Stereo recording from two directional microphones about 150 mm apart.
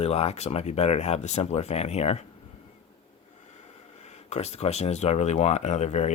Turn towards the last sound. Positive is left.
turn(degrees=50)  # may be behind; listen again after turning